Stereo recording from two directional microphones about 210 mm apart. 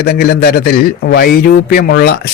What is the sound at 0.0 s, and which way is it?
Speech, 50° left (ahead or behind).